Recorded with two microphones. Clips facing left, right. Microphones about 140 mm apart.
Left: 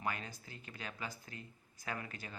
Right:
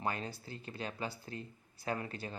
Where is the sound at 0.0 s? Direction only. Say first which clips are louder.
Right 3 dB; 30° right (ahead or behind).